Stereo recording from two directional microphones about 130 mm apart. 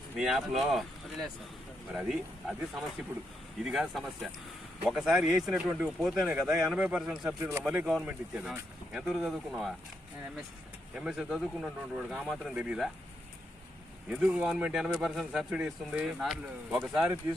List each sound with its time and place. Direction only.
0.2 s speech: centre (ahead or behind)
10.9 s speech: 5° right (ahead or behind)
14.2 s speech: 5° right (ahead or behind)